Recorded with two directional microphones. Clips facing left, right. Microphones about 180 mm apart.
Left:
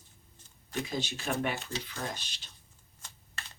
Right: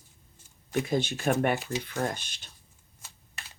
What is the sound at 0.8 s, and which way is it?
Speech, 55° right (ahead or behind).